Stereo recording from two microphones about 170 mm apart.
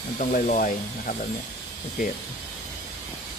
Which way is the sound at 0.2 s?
50° left (ahead or behind).